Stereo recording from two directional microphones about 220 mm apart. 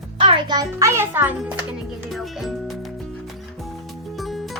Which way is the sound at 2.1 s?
Centre (ahead or behind).